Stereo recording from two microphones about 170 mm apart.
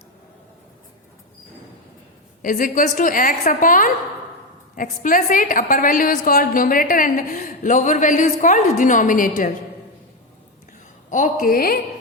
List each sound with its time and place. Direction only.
2.4 s a woman's voice: 55° left (ahead or behind)
11.1 s a woman's voice: 50° left (ahead or behind)